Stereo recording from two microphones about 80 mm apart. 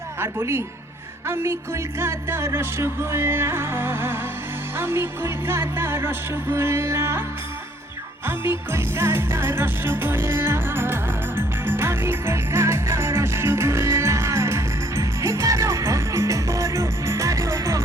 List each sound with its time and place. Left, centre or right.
0.2 s music: right
8.3 s music: right